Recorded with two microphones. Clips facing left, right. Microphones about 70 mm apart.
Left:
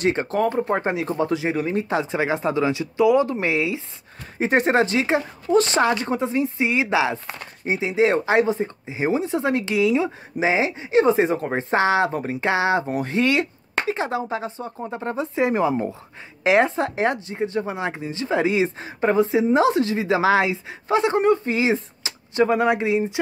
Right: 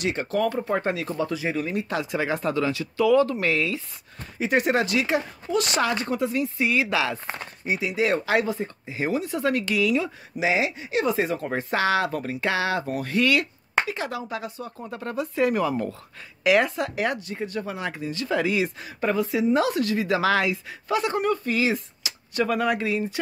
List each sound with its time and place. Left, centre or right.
0.0 s speech: left
4.4 s speech: left